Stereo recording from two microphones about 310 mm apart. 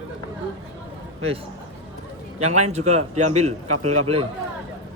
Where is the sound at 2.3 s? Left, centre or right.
Right.